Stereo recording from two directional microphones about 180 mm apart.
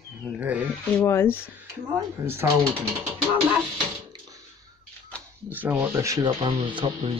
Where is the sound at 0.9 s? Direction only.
15° left (ahead or behind).